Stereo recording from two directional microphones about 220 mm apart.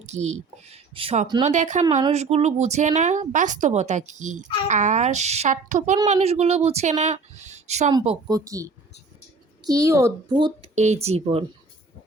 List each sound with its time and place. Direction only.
0.0 s speech: 30° right (ahead or behind)